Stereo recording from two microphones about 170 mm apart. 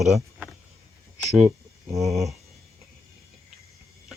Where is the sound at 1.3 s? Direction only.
40° right (ahead or behind).